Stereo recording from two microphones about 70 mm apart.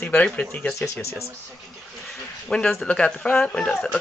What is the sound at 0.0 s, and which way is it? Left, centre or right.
Speech, left.